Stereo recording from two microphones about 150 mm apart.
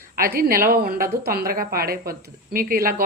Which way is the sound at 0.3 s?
75° right (ahead or behind).